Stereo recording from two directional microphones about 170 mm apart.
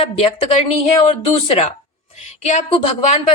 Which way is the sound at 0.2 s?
35° left (ahead or behind).